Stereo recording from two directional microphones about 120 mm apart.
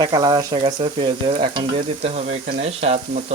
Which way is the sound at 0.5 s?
40° right (ahead or behind).